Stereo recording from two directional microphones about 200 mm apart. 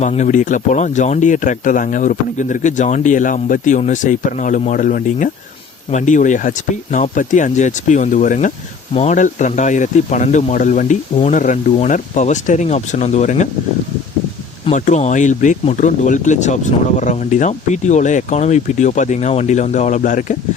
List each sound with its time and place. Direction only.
0.0 s speech: 35° left (ahead or behind)
14.7 s speech: 35° left (ahead or behind)